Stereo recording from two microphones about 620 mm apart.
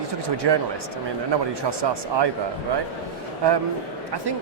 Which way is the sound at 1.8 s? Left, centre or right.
Right.